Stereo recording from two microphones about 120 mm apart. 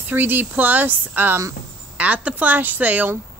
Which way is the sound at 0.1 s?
15° right (ahead or behind).